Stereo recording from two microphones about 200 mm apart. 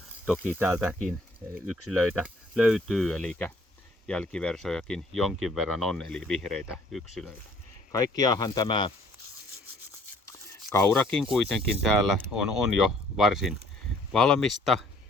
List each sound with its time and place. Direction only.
0.4 s cricket: 10° right (ahead or behind)
1.7 s speech: centre (ahead or behind)
7.9 s speech: 20° left (ahead or behind)
10.7 s speech: 10° left (ahead or behind)